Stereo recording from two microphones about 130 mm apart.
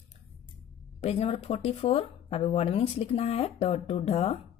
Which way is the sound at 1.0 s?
50° left (ahead or behind).